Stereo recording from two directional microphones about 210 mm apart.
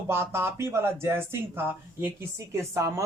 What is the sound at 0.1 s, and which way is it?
A woman's voice, 10° right (ahead or behind).